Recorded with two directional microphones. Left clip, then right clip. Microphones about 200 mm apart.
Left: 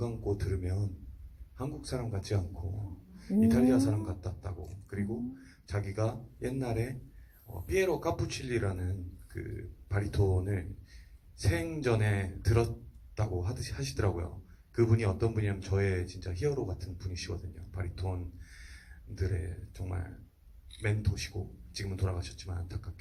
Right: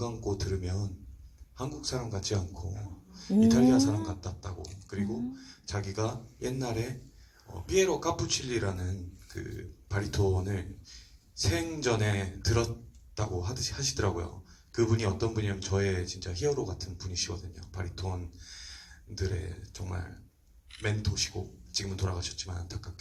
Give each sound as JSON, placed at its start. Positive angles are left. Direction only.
{"t": 0.0, "sound": "a man's voice", "side_deg": -50}
{"t": 9.9, "sound": "a man's voice", "side_deg": -50}